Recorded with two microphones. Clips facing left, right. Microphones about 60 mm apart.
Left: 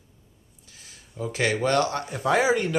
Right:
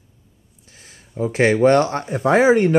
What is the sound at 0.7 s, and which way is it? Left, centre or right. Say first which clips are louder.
Speech: right 4 dB; right.